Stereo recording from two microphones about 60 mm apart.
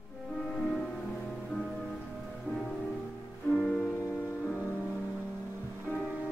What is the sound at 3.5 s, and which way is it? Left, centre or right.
Music, left.